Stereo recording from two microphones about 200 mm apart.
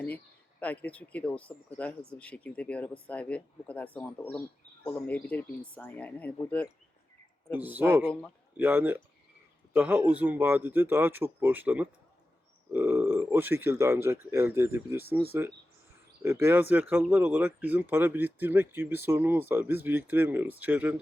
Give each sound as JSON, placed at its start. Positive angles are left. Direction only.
{"t": 0.6, "sound": "speech", "side_deg": 5}
{"t": 7.5, "sound": "speech", "side_deg": -10}
{"t": 16.2, "sound": "speech", "side_deg": -10}